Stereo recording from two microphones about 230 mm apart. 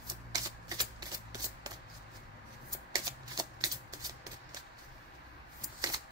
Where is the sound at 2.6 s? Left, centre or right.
Centre.